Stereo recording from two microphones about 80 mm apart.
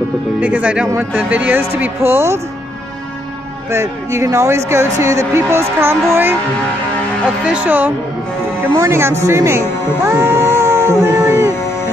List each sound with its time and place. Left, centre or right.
0.4 s speech: centre
2.0 s speech: right
3.7 s speech: right
7.4 s speech: centre
8.7 s speech: right